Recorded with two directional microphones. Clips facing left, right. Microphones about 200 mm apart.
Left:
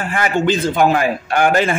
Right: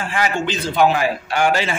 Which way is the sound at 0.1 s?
50° left (ahead or behind).